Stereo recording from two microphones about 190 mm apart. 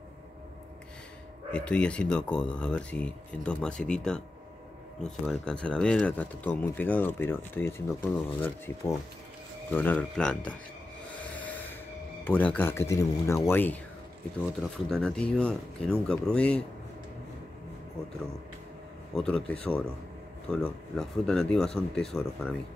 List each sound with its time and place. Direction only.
1.5 s speech: 5° left (ahead or behind)
11.1 s rub: 10° left (ahead or behind)
12.3 s speech: 10° left (ahead or behind)
19.1 s speech: 5° left (ahead or behind)